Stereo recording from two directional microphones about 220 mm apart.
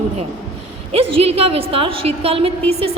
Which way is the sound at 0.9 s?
25° right (ahead or behind).